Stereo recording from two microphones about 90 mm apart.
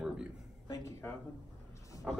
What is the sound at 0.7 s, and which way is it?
Speech, 30° left (ahead or behind).